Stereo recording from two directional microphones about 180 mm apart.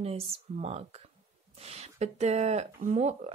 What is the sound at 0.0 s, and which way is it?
Speech, 35° right (ahead or behind).